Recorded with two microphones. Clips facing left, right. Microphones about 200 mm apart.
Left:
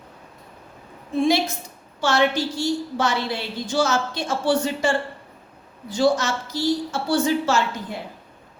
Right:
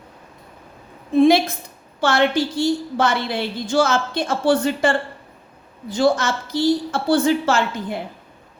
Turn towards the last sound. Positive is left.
turn(degrees=-60)  # may be behind; listen again after turning